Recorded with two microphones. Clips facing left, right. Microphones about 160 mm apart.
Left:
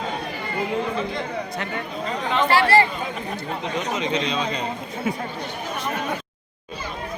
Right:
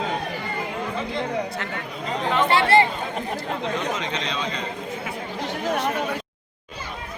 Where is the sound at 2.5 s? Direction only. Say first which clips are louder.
Left 1 dB; 20° right (ahead or behind).